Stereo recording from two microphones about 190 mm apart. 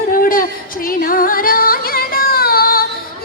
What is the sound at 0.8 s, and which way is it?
Music, 50° left (ahead or behind).